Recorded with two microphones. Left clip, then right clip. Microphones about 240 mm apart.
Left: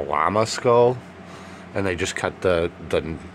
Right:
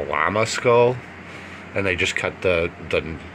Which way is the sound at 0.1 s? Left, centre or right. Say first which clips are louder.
Even; centre.